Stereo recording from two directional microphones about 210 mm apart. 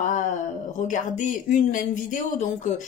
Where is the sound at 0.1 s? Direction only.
35° left (ahead or behind).